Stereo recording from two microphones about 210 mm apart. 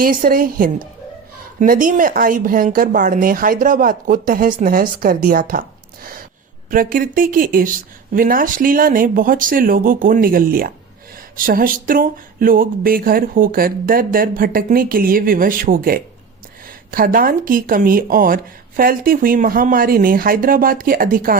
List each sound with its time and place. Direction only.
0.0 s speech: 40° right (ahead or behind)